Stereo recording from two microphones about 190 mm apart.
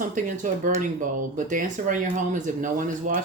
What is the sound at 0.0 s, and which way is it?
Speech, 45° right (ahead or behind).